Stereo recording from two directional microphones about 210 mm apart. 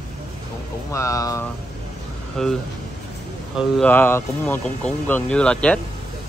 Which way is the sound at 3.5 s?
Centre (ahead or behind).